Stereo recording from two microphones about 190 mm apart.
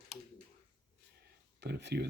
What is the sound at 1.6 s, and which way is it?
Speech, 60° right (ahead or behind).